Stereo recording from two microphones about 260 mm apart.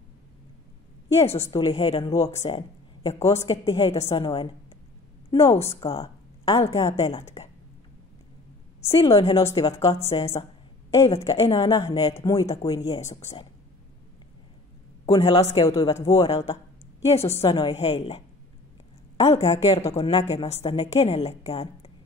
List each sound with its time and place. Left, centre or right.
1.2 s a woman's voice: left
9.0 s a woman's voice: left
11.1 s speech: left
15.0 s speech: centre
16.3 s a woman's voice: left
19.5 s a woman's voice: centre